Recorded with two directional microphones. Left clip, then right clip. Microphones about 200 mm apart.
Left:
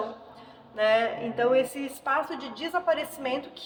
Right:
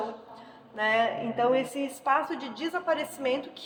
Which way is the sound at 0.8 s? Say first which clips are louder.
Left 2 dB; 15° right (ahead or behind).